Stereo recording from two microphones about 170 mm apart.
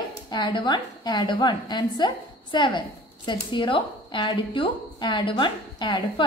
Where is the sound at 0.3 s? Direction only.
25° left (ahead or behind).